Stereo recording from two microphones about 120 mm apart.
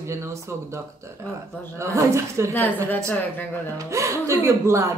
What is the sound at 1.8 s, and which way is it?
Speech, 25° right (ahead or behind).